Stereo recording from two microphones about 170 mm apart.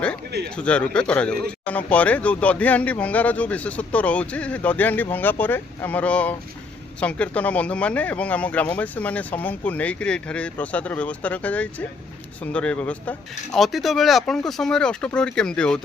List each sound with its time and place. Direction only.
0.3 s speech: 75° right (ahead or behind)
0.5 s speech: 5° left (ahead or behind)